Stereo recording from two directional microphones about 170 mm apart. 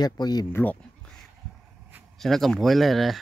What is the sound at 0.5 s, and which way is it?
Speech, 10° left (ahead or behind).